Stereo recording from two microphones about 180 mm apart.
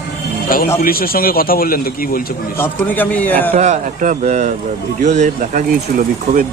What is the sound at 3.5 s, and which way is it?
A man's voice, 40° right (ahead or behind).